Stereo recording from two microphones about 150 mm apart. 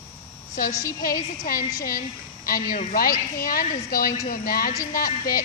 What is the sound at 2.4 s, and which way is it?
A woman's voice, 75° left (ahead or behind).